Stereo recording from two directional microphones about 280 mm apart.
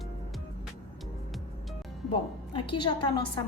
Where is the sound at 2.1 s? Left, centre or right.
Centre.